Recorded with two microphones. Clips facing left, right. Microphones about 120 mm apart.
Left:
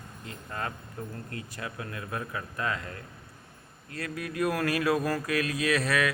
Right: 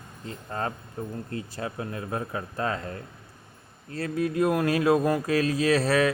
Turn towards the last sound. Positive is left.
turn(degrees=-30)  # may be behind; listen again after turning